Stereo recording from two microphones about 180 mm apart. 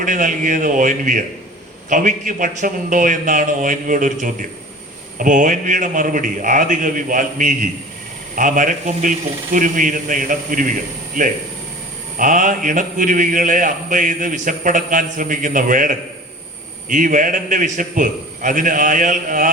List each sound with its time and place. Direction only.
0.0 s a man's voice: 45° right (ahead or behind)
12.2 s a man's voice: 45° right (ahead or behind)